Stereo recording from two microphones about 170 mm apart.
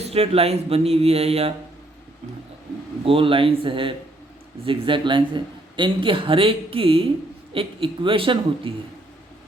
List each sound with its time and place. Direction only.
0.0 s a man's voice: 35° right (ahead or behind)
3.0 s a man's voice: 30° right (ahead or behind)